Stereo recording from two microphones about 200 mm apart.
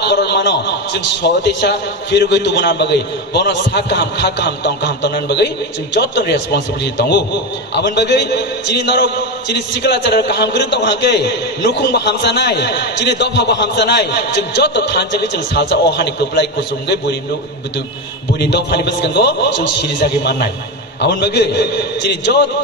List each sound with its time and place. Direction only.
0.0 s a man's voice: 55° left (ahead or behind)
18.4 s a man's voice: 55° left (ahead or behind)
21.0 s a man's voice: 55° left (ahead or behind)